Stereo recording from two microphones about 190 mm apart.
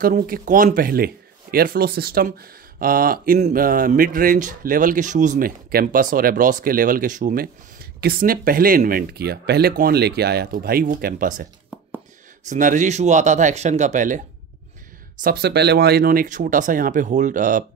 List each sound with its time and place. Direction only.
0.0 s speech: 45° right (ahead or behind)
12.4 s speech: 40° right (ahead or behind)
15.2 s speech: 60° right (ahead or behind)